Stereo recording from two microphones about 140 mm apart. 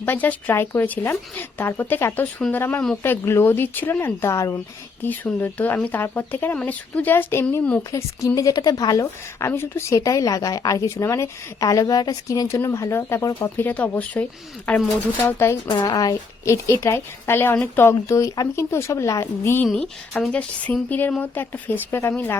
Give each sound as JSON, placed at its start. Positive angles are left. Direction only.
{"t": 0.0, "sound": "speech", "side_deg": 15}
{"t": 7.9, "sound": "a woman's voice", "side_deg": 25}
{"t": 15.7, "sound": "a woman's voice", "side_deg": 30}
{"t": 19.6, "sound": "speech", "side_deg": 5}